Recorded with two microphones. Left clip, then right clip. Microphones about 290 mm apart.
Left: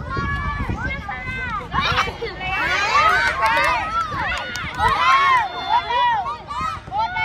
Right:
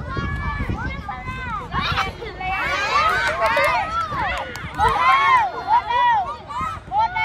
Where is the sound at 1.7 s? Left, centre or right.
Left.